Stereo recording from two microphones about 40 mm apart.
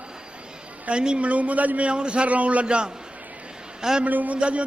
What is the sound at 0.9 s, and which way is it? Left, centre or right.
A man's voice, right.